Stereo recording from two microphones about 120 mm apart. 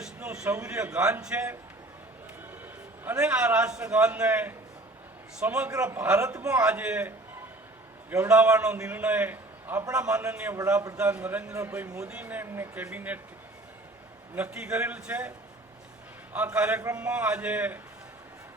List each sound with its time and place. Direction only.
0.0 s a sound: 5° right (ahead or behind)
0.6 s a man's voice: 10° right (ahead or behind)
3.0 s a man's voice: 15° right (ahead or behind)
6.7 s a man's voice: 10° right (ahead or behind)
8.3 s a man's voice: 10° right (ahead or behind)
11.5 s a man's voice: 25° right (ahead or behind)
11.9 s a man's voice: 10° right (ahead or behind)
14.3 s a man's voice: 10° right (ahead or behind)
16.3 s a man's voice: 10° right (ahead or behind)